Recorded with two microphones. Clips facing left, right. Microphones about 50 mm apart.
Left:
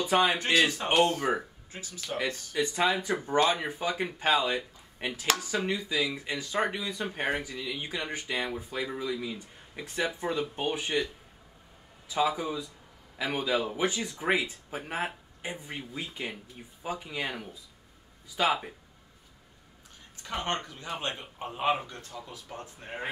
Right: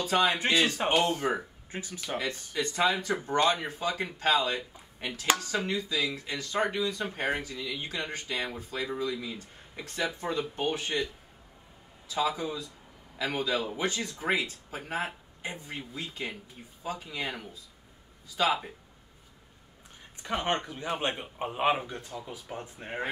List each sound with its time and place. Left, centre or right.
0.0 s a man's voice: centre
0.4 s speech: centre
1.3 s speech: centre
1.7 s speech: right
2.5 s speech: centre
3.6 s speech: centre
12.1 s a man's voice: left
18.3 s speech: centre
20.3 s speech: centre
20.7 s speech: right